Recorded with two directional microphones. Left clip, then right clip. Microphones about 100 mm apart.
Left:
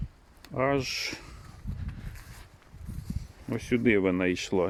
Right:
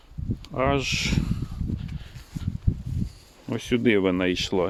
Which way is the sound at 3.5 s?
25° right (ahead or behind).